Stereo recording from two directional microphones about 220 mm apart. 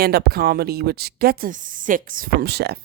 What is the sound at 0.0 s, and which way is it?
A woman's voice, 45° right (ahead or behind).